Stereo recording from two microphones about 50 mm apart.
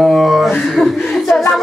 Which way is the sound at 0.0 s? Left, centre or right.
Centre.